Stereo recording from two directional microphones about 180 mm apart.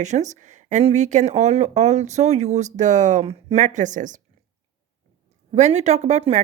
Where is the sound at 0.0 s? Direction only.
40° right (ahead or behind).